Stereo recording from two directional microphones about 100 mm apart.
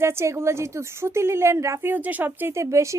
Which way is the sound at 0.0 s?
25° right (ahead or behind).